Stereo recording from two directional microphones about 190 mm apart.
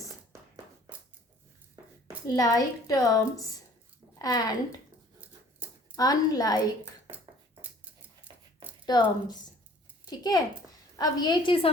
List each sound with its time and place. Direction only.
2.2 s a woman's voice: 20° left (ahead or behind)
6.0 s a woman's voice: 20° left (ahead or behind)
8.9 s a woman's voice: 20° left (ahead or behind)